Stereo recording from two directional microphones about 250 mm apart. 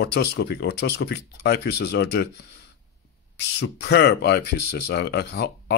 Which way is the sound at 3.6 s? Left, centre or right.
Left.